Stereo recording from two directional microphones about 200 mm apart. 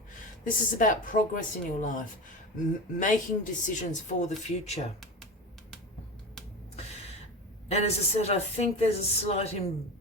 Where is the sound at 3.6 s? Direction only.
40° left (ahead or behind).